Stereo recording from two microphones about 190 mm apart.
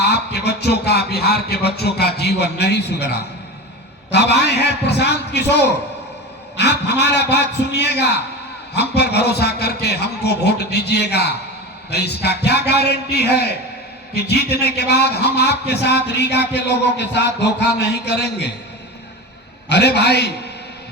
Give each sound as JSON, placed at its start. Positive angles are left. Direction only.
{"t": 0.0, "sound": "a sound", "side_deg": 60}
{"t": 4.1, "sound": "a man's voice", "side_deg": 65}
{"t": 6.6, "sound": "a man's voice", "side_deg": 65}
{"t": 19.6, "sound": "a man's voice", "side_deg": 60}